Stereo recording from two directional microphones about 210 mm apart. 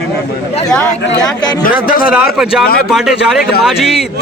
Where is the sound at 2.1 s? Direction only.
5° right (ahead or behind).